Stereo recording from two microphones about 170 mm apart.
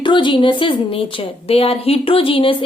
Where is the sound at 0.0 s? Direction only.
30° left (ahead or behind).